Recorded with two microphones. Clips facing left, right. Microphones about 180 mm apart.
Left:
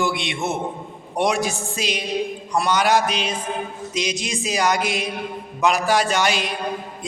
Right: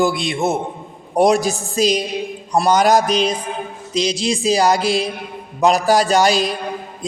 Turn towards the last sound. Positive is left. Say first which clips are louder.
# right 6 dB
turn(degrees=-35)  # may be behind; listen again after turning